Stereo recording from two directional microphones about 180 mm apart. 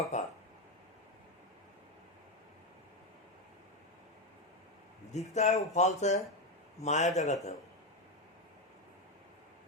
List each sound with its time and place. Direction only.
0.0 s chink: 40° left (ahead or behind)
5.1 s speech: 40° left (ahead or behind)